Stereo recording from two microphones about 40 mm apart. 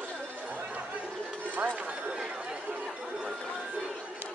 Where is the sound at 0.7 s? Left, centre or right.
Right.